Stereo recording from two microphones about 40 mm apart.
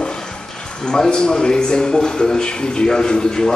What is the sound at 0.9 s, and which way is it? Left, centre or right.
A man's voice, centre.